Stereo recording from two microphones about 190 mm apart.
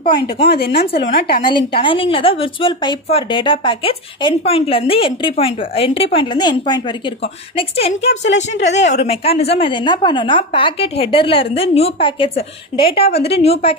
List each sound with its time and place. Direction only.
0.0 s a woman's voice: 25° left (ahead or behind)
0.5 s speech: 60° left (ahead or behind)
1.4 s a woman's voice: 25° left (ahead or behind)
8.9 s a woman's voice: 30° left (ahead or behind)